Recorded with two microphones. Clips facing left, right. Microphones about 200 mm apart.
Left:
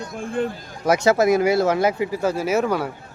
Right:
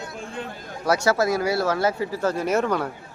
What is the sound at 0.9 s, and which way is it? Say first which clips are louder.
Speech: left 4 dB; 20° left (ahead or behind).